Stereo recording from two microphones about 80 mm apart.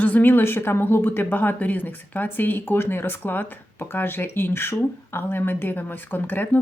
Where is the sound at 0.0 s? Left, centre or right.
Left.